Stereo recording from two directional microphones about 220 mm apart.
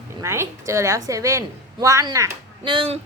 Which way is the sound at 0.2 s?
10° right (ahead or behind).